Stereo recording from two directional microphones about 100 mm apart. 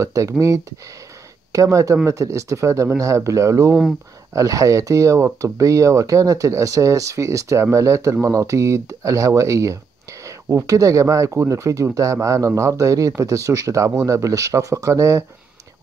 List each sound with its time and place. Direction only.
0.0 s speech: 30° right (ahead or behind)